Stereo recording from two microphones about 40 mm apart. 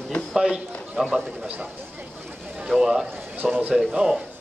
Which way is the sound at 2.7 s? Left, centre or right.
Centre.